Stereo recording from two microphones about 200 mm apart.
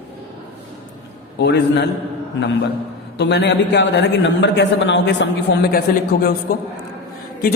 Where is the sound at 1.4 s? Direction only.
60° left (ahead or behind).